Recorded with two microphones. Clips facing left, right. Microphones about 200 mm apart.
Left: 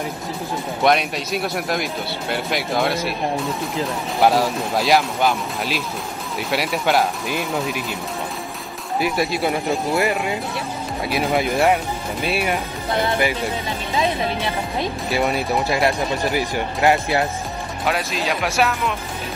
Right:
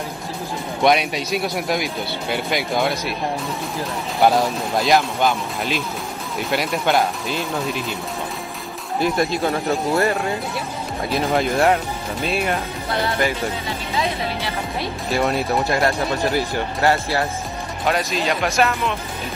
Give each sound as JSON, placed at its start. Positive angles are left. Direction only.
{"t": 0.8, "sound": "speech", "side_deg": 0}
{"t": 4.2, "sound": "speech", "side_deg": 5}
{"t": 9.0, "sound": "speech", "side_deg": 5}
{"t": 9.9, "sound": "speech", "side_deg": 15}
{"t": 11.4, "sound": "speech", "side_deg": 5}
{"t": 15.0, "sound": "speech", "side_deg": 0}
{"t": 16.3, "sound": "speech", "side_deg": 15}
{"t": 17.8, "sound": "speech", "side_deg": 0}